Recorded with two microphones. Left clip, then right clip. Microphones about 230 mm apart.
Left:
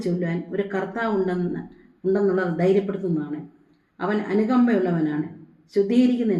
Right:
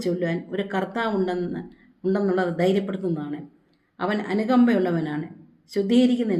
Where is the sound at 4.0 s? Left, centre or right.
Right.